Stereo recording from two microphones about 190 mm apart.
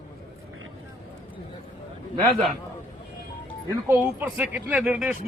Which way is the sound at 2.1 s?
30° right (ahead or behind).